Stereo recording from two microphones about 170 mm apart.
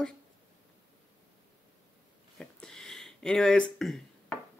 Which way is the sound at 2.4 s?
5° left (ahead or behind).